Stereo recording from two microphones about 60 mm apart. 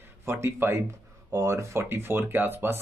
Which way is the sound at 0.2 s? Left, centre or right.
Right.